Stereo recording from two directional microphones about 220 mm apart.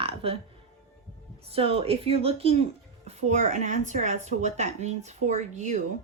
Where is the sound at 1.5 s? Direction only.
25° right (ahead or behind).